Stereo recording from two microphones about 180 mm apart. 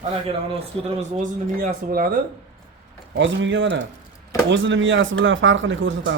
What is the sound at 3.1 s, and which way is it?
Speech, 85° right.